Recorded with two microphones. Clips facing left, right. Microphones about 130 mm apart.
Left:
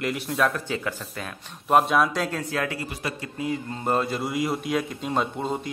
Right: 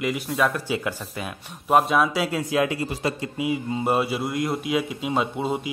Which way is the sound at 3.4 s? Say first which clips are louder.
Right 2 dB; 10° right (ahead or behind).